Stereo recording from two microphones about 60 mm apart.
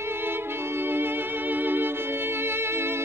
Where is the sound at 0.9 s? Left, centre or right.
Right.